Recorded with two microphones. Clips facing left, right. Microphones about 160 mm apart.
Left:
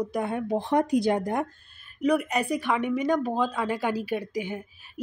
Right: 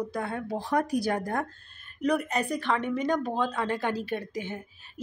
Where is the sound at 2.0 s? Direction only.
5° left (ahead or behind).